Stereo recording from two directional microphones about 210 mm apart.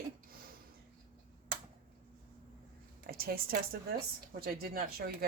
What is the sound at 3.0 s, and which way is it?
A woman's voice, 45° right (ahead or behind).